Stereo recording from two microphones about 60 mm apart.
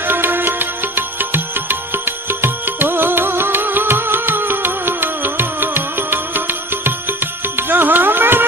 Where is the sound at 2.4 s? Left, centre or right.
Right.